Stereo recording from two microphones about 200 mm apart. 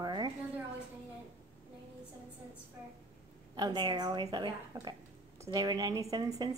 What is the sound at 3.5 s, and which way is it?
A woman's voice, 20° right (ahead or behind).